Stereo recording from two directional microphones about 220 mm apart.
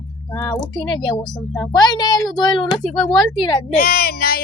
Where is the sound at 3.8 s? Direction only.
45° left (ahead or behind).